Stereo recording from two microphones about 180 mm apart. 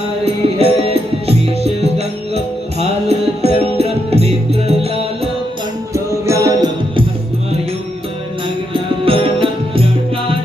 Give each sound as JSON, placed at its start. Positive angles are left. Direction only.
{"t": 0.6, "sound": "music", "side_deg": -35}
{"t": 5.9, "sound": "music", "side_deg": -15}
{"t": 8.7, "sound": "music", "side_deg": -30}